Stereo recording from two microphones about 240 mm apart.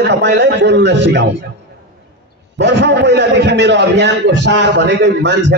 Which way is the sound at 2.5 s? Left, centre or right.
Right.